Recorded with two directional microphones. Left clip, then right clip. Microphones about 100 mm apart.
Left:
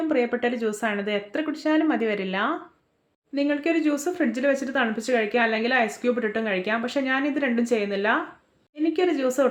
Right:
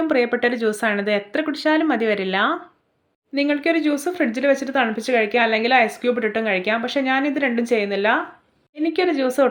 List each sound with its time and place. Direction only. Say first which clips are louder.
0.1 s speech: right 4 dB; 30° right (ahead or behind)
3.3 s speech: right 4 dB; 15° right (ahead or behind)